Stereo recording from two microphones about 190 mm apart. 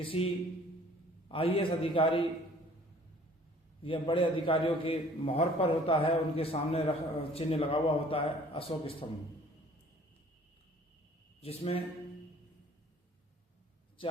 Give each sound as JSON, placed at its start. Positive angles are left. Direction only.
{"t": 0.0, "sound": "a man's voice", "side_deg": 30}
{"t": 1.3, "sound": "a man's voice", "side_deg": 30}
{"t": 3.8, "sound": "a man's voice", "side_deg": 25}
{"t": 11.4, "sound": "a man's voice", "side_deg": 30}
{"t": 14.0, "sound": "a man's voice", "side_deg": 25}